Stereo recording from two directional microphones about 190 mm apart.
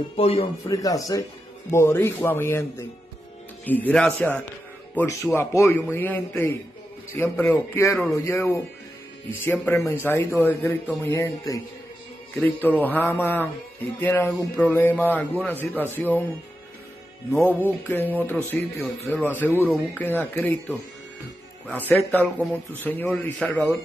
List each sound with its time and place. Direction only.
0.1 s speech: 30° left (ahead or behind)
0.7 s a man's voice: 20° left (ahead or behind)
3.6 s a man's voice: 10° left (ahead or behind)
17.6 s a man's voice: 10° left (ahead or behind)